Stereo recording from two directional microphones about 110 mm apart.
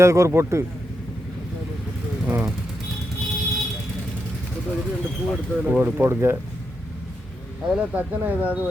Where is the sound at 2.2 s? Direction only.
15° right (ahead or behind).